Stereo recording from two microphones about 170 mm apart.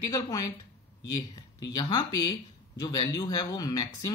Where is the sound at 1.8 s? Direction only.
25° left (ahead or behind).